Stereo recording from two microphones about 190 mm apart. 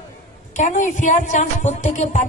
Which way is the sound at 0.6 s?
40° left (ahead or behind).